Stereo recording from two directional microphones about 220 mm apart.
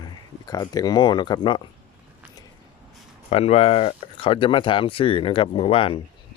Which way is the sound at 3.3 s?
25° left (ahead or behind).